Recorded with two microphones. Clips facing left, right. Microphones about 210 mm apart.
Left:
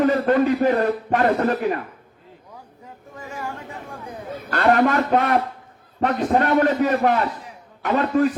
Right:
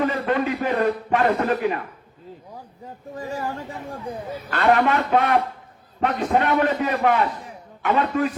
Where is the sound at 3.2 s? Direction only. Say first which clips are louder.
Right 5 dB; 35° right (ahead or behind).